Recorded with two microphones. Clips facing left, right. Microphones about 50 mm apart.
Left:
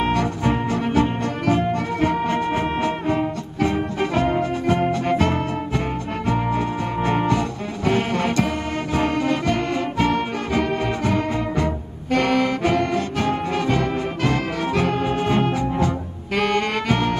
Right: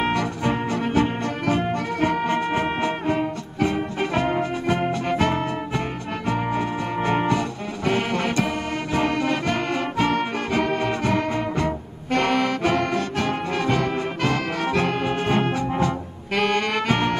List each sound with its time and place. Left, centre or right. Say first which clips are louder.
0.7 s music: left 2 dB; right
3.2 s music: left 1 dB; left
4.4 s music: left 2 dB; right
7.2 s music: left 1 dB; centre
7.8 s music: left 2 dB; right
12.7 s brass instrument: left 2 dB; right
14.6 s music: left 1 dB; right
15.2 s music: left 1 dB; right
16.3 s saxophone: left 1 dB; right